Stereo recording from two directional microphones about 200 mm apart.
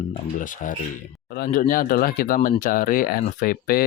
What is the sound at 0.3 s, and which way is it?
Speech, 40° left (ahead or behind).